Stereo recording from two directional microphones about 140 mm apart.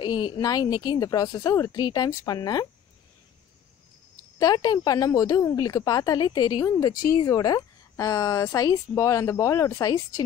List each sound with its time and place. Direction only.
0.0 s a woman's voice: 35° left (ahead or behind)
4.4 s a woman's voice: 25° left (ahead or behind)